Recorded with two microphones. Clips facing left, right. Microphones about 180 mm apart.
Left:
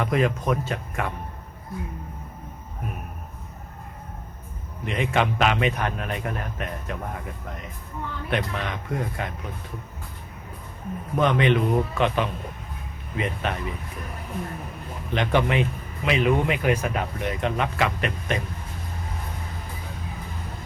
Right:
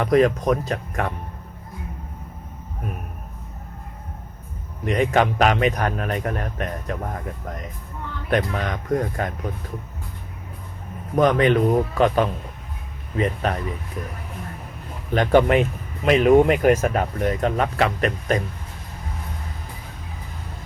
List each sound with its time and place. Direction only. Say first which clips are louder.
0.0 s speech: right 6 dB; 35° right (ahead or behind)
4.9 s speech: right 5 dB; 40° right (ahead or behind)
11.2 s speech: right 4 dB; 40° right (ahead or behind)
15.1 s speech: right 6 dB; 45° right (ahead or behind)